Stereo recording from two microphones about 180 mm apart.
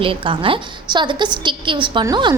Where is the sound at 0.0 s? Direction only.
30° right (ahead or behind).